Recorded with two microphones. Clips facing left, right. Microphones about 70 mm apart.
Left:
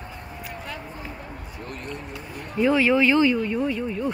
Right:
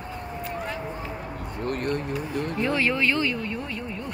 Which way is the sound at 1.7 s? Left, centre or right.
Right.